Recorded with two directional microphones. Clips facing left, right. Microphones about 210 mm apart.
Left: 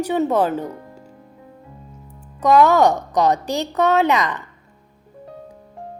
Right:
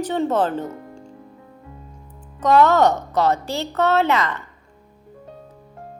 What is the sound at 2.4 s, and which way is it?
A woman's voice, 10° left (ahead or behind).